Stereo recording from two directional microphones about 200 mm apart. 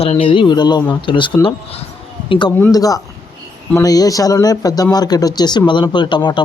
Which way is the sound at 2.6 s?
15° left (ahead or behind).